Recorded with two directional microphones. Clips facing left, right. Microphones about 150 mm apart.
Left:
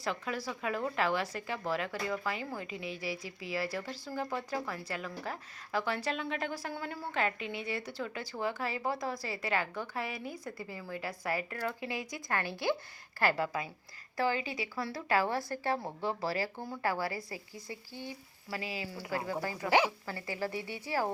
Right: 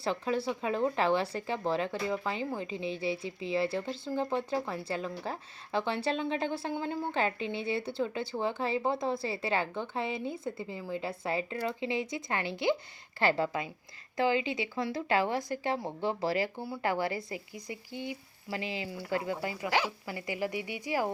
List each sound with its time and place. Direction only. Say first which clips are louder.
0.0 s speech: right 5 dB; 30° right (ahead or behind); by 21.1 s 15° right (ahead or behind)